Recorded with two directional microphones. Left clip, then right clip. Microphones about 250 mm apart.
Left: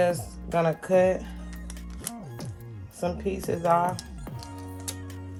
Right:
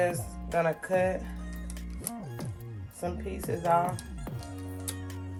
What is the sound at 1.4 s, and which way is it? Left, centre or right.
Music, centre.